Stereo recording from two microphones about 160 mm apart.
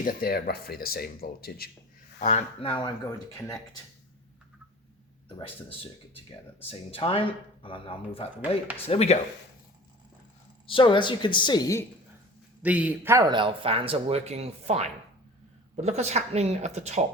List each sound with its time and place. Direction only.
0.0 s speech: 65° left (ahead or behind)
2.1 s speech: 45° left (ahead or behind); by 3.8 s 20° left (ahead or behind)
5.4 s speech: 35° left (ahead or behind)
10.7 s speech: 30° left (ahead or behind)
12.6 s a man's voice: 10° right (ahead or behind)
13.3 s speech: 30° right (ahead or behind)